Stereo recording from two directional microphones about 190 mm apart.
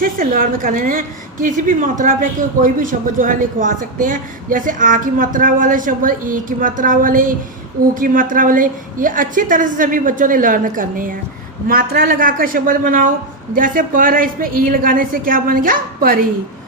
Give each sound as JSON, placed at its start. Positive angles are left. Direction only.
{"t": 0.0, "sound": "speech", "side_deg": -50}